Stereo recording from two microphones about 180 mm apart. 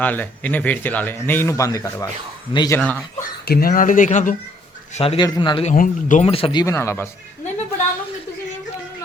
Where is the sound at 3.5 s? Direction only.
55° left (ahead or behind); by 5.2 s 35° left (ahead or behind).